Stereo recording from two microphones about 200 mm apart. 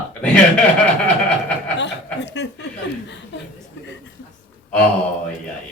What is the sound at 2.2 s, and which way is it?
Speech, 60° left (ahead or behind).